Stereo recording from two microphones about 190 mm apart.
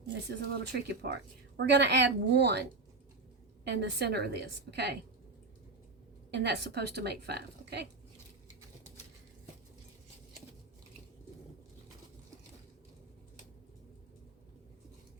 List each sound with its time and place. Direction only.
0.1 s a woman's voice: 60° right (ahead or behind)
6.3 s a woman's voice: 60° right (ahead or behind)